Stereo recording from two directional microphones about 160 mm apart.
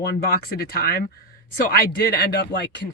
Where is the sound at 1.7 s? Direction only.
90° left.